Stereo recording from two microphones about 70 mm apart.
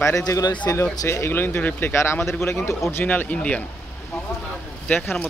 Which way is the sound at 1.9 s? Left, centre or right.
Left.